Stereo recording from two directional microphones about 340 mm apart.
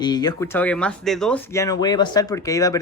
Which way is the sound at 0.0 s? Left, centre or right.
Centre.